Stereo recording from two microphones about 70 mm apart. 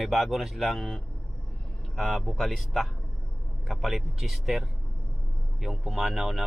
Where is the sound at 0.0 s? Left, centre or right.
Centre.